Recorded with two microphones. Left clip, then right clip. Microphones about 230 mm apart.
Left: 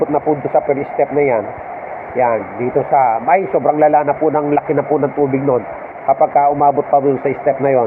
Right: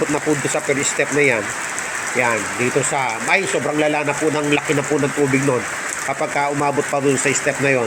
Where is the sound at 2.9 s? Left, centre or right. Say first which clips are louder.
Left 7 dB; centre.